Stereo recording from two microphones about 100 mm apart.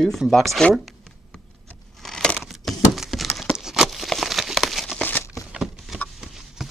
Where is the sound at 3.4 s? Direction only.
Centre (ahead or behind).